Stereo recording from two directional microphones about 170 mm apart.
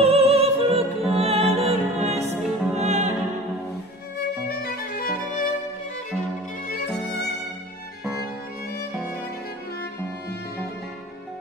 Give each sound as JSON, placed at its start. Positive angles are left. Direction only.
{"t": 0.0, "sound": "music", "side_deg": -35}
{"t": 2.4, "sound": "music", "side_deg": -5}
{"t": 2.8, "sound": "music", "side_deg": -40}
{"t": 4.5, "sound": "violin", "side_deg": 60}